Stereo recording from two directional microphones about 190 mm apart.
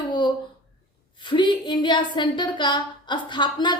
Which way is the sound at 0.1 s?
25° left (ahead or behind).